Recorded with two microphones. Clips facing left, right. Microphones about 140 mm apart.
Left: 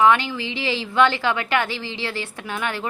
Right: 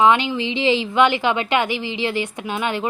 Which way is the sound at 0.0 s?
20° right (ahead or behind).